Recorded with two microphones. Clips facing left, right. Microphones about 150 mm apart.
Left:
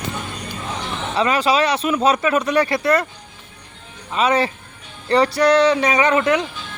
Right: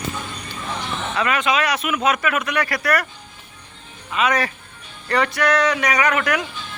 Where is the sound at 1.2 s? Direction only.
30° left (ahead or behind).